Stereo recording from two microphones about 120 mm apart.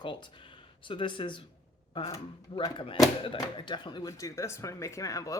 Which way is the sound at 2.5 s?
45° left (ahead or behind).